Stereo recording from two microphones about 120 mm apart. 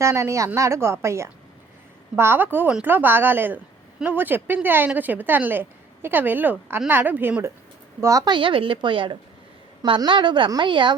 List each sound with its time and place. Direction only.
0.0 s a woman's voice: 25° right (ahead or behind)
8.0 s a woman's voice: 25° right (ahead or behind)
8.3 s a woman's voice: 45° right (ahead or behind)